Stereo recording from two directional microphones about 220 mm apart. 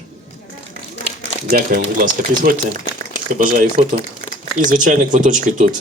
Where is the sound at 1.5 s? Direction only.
40° right (ahead or behind).